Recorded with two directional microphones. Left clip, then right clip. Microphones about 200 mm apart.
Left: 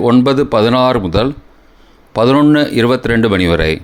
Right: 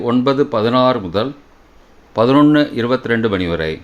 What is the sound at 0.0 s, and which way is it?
Speech, 30° left (ahead or behind).